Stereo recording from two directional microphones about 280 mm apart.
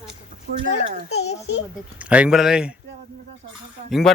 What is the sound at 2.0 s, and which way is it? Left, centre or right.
Speech, centre.